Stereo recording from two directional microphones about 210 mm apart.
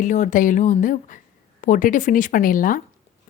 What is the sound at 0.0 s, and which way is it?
Speech, 35° left (ahead or behind).